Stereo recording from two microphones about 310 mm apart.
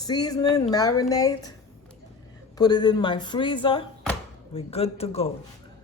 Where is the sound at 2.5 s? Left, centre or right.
Centre.